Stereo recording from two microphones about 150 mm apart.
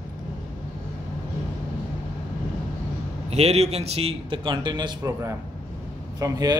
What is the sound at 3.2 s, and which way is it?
A man's voice, 45° right (ahead or behind).